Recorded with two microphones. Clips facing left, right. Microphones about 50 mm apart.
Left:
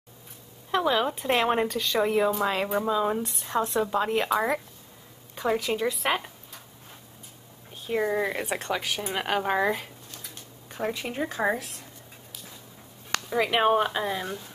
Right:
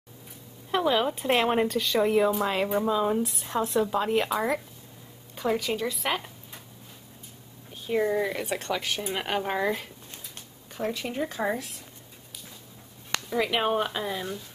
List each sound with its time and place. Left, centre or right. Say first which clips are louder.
0.7 s speech: even; centre
8.0 s a woman's voice: even; centre
13.3 s a woman's voice: left 3 dB; centre